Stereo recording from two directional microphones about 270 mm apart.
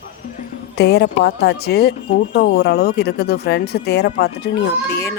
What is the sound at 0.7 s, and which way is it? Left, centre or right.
Speech, left.